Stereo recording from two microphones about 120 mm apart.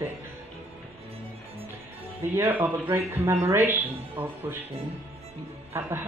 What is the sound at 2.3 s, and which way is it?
Speech, 20° right (ahead or behind).